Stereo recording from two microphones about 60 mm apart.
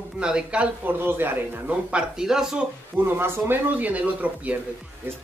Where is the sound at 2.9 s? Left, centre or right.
Right.